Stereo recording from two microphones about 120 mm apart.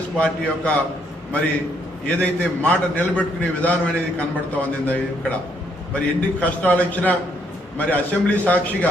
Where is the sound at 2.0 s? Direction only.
10° left (ahead or behind).